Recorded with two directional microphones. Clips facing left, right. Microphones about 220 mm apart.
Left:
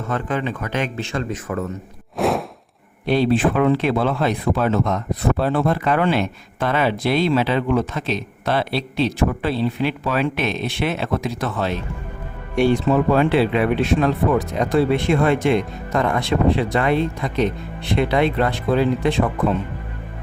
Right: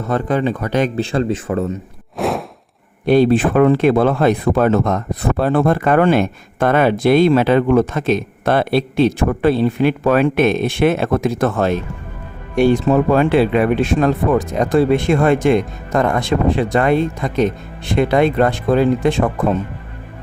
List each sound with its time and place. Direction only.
0.0 s speech: 35° right (ahead or behind)
2.1 s whoosh: centre (ahead or behind)
3.1 s speech: 50° right (ahead or behind)